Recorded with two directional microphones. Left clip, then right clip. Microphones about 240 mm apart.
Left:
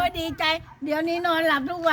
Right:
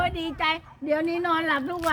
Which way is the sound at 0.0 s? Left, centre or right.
Left.